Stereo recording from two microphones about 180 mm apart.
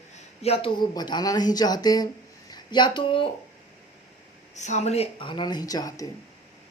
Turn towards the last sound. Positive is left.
turn(degrees=20)  # may be behind; listen again after turning